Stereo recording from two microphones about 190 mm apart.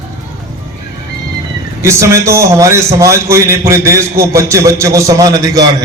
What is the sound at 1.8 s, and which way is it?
A man's voice, 15° right (ahead or behind).